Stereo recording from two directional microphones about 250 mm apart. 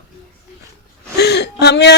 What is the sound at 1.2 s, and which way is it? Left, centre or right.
Whimper, left.